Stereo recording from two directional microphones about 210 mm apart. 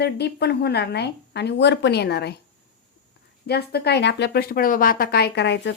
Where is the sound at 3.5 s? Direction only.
50° left (ahead or behind).